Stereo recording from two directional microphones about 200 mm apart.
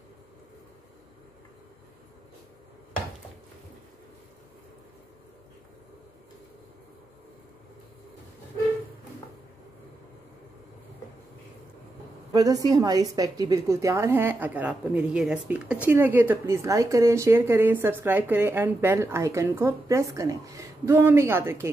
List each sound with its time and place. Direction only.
12.3 s a woman's voice: 15° right (ahead or behind)